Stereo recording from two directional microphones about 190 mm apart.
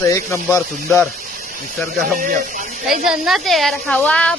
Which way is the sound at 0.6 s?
5° left (ahead or behind).